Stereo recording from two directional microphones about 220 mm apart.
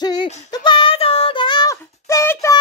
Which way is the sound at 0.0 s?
20° left (ahead or behind).